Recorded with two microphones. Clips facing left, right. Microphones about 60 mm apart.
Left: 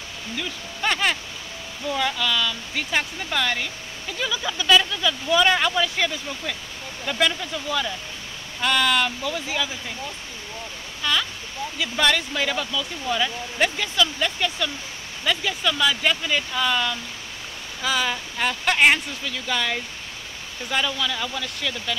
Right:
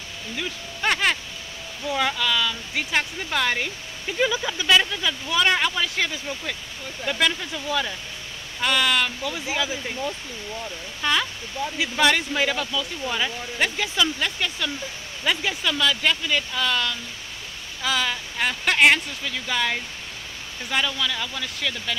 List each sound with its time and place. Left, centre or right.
0.4 s speech: centre
5.3 s speech: centre
11.0 s speech: right; by 14.7 s centre
15.8 s speech: centre